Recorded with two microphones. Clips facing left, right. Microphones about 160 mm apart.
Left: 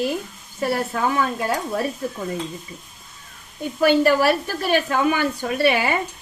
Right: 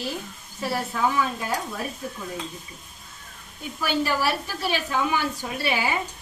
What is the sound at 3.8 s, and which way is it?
A woman's voice, 60° left (ahead or behind).